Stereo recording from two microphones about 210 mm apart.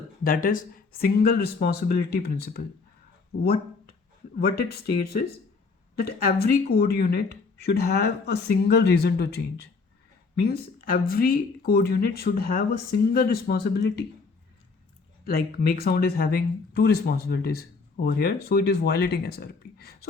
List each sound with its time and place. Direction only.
0.3 s speech: 40° left (ahead or behind)
4.4 s speech: 45° left (ahead or behind)
15.2 s speech: 45° left (ahead or behind)